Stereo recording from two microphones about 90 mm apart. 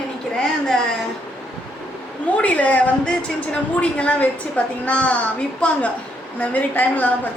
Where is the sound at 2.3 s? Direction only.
15° left (ahead or behind).